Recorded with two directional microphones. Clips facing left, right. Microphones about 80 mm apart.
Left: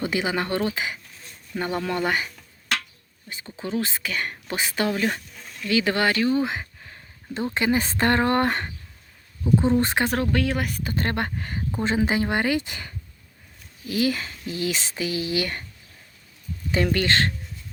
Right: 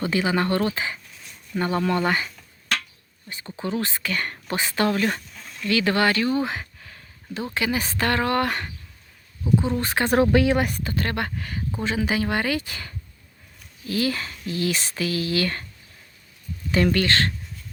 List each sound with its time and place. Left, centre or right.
0.0 s speech: centre
1.9 s dishes: centre
3.8 s speech: centre
5.6 s speech: centre
6.4 s a sound: left
7.5 s speech: left
9.7 s speech: centre
10.2 s speech: centre
10.5 s speech: centre
10.9 s speech: left
16.7 s speech: centre